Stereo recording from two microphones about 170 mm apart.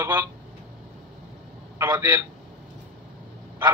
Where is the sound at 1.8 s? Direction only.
10° right (ahead or behind).